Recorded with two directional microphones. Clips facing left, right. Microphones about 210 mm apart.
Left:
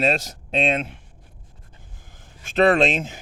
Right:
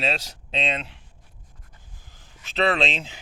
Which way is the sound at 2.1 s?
50° left (ahead or behind).